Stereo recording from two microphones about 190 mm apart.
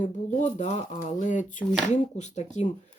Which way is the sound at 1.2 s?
40° left (ahead or behind).